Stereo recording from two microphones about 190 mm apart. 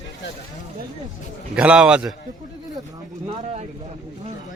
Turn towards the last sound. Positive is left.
turn(degrees=-30)  # may be behind; listen again after turning